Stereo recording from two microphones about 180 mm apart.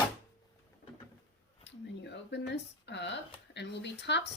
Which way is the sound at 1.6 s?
75° left (ahead or behind).